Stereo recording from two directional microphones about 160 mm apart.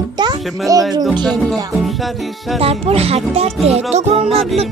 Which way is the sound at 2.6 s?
40° right (ahead or behind).